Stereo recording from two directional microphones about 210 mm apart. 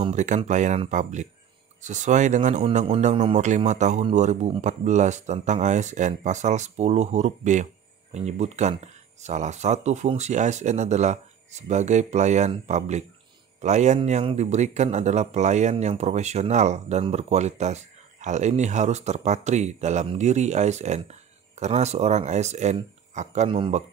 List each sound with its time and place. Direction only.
0.0 s speech: 35° right (ahead or behind)